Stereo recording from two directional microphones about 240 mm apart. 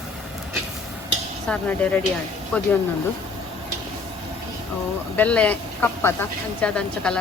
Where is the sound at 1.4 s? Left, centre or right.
Centre.